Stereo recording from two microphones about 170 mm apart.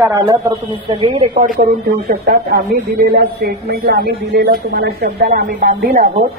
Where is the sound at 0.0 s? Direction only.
20° right (ahead or behind).